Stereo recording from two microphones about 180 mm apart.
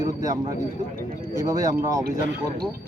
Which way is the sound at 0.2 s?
20° right (ahead or behind).